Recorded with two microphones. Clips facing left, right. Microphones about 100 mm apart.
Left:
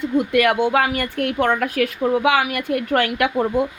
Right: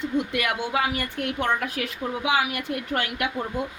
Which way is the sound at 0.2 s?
55° left (ahead or behind).